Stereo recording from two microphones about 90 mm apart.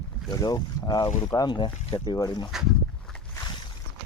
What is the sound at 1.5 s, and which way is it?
Speech, 60° left (ahead or behind).